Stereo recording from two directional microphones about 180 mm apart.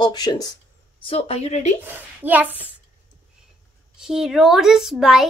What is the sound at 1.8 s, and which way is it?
Speech, 10° right (ahead or behind).